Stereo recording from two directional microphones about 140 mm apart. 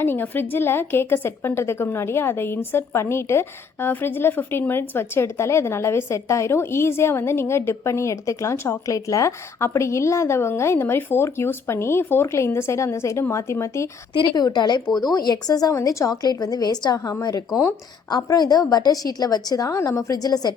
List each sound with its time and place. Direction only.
0.0 s a woman's voice: 15° left (ahead or behind)
14.1 s a woman's voice: 35° left (ahead or behind)